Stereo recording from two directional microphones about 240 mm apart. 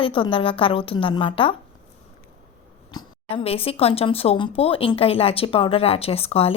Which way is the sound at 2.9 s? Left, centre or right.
Left.